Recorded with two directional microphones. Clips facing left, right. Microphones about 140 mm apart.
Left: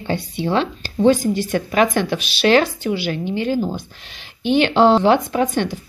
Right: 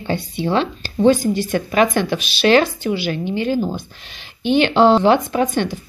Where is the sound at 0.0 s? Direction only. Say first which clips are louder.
Right 1 dB; centre (ahead or behind).